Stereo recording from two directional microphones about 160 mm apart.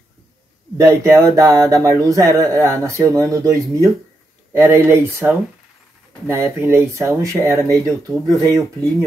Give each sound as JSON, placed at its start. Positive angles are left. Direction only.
{"t": 0.7, "sound": "speech", "side_deg": -20}